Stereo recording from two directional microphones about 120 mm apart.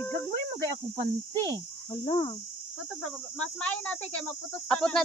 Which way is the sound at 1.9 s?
55° left (ahead or behind).